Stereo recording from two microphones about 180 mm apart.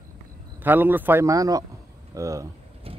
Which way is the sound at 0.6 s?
10° right (ahead or behind).